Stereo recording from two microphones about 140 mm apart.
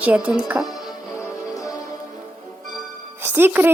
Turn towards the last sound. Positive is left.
turn(degrees=-15)  # may be behind; listen again after turning